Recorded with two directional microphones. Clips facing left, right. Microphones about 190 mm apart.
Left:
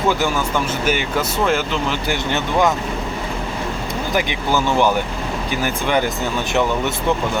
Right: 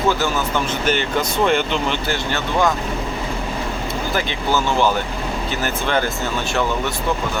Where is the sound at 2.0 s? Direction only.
15° left (ahead or behind).